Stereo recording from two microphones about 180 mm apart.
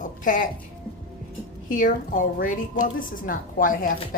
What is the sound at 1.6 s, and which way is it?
A woman's voice, 45° left (ahead or behind).